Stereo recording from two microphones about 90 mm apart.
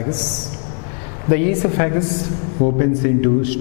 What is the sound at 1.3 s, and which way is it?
A man's voice, 10° left (ahead or behind).